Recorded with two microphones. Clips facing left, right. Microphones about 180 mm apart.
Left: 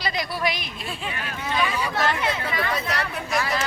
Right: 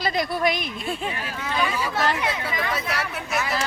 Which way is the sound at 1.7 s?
5° right (ahead or behind).